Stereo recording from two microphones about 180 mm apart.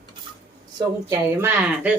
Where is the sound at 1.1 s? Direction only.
15° right (ahead or behind).